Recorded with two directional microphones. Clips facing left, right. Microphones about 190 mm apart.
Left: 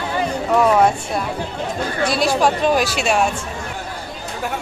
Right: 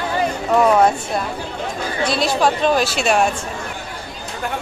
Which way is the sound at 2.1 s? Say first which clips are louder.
Even; 10° left (ahead or behind).